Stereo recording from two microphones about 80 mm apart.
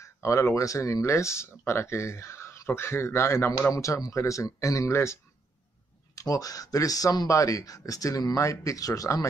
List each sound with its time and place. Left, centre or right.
0.0 s speech: left
3.7 s speech: left
6.1 s speech: left